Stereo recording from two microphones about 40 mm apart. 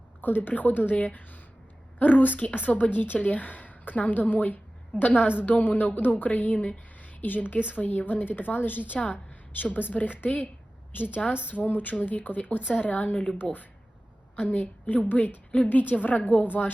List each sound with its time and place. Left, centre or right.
0.2 s a woman's voice: left
10.9 s a woman's voice: left